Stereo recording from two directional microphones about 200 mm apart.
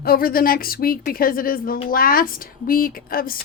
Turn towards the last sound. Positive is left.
turn(degrees=45)  # may be behind; listen again after turning